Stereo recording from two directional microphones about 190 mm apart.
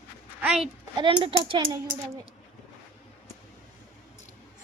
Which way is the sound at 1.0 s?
30° right (ahead or behind).